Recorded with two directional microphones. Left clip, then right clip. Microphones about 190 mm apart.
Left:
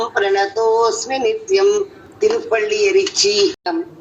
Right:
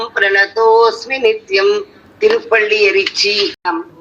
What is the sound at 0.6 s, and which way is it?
Speech, 35° right (ahead or behind).